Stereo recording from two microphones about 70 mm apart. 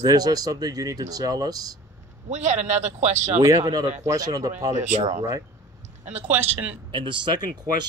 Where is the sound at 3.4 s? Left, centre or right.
Right.